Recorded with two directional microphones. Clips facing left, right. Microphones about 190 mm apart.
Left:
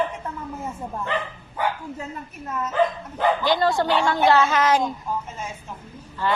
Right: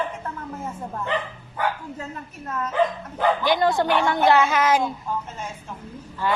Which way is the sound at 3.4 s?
20° right (ahead or behind).